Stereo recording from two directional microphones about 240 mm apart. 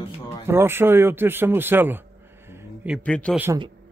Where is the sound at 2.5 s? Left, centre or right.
Centre.